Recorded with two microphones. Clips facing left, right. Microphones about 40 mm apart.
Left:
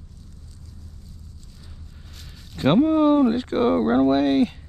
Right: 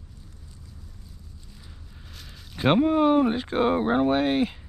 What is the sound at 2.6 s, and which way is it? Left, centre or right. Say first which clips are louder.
Speech: left 3 dB; centre.